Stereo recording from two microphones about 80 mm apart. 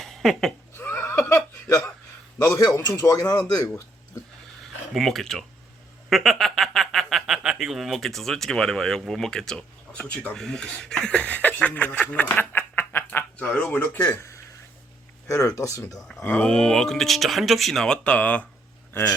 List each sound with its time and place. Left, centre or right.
0.0 s a sound: centre
0.8 s a sound: left
1.3 s chuckle: left
2.4 s speech: left
4.9 s speech: centre; by 13.1 s left
13.1 s a sound: left
13.7 s speech: left
15.5 s speech: left
16.2 s speech: centre